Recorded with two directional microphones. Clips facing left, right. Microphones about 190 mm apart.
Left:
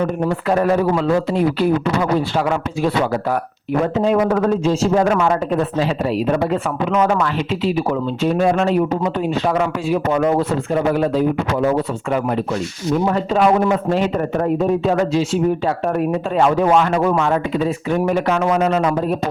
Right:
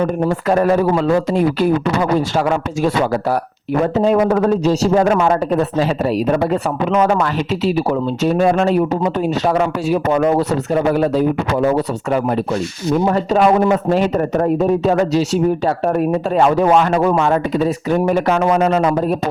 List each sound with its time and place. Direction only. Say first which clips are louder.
0.4 s a man's voice: right 2 dB; 40° right (ahead or behind)
3.9 s speech: right 3 dB; 40° right (ahead or behind)
13.1 s speech: right 2 dB; 40° right (ahead or behind)